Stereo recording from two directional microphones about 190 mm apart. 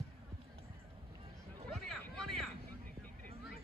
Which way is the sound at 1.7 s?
Centre (ahead or behind).